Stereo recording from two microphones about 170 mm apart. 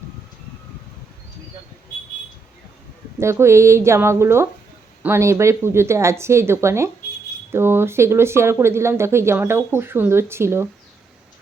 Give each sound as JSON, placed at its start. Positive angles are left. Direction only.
{"t": 3.2, "sound": "speech", "side_deg": -15}